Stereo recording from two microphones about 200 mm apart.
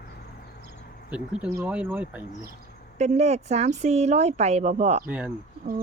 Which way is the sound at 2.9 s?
35° right (ahead or behind).